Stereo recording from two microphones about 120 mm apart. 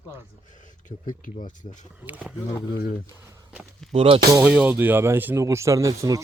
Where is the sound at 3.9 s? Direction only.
50° right (ahead or behind).